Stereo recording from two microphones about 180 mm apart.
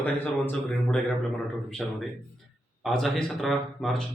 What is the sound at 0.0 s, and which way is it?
A man's voice, 10° left (ahead or behind).